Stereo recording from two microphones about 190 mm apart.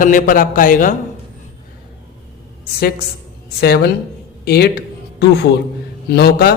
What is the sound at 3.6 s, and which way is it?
Speech, 55° left (ahead or behind).